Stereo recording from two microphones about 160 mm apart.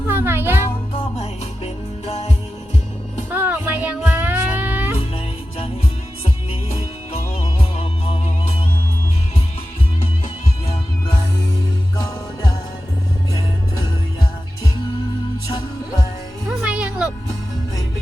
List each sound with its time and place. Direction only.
0.1 s music: 15° right (ahead or behind)
0.9 s music: 40° left (ahead or behind)
3.2 s music: 10° right (ahead or behind)
5.1 s music: 35° left (ahead or behind)
11.9 s music: 20° left (ahead or behind)
16.5 s music: 5° right (ahead or behind)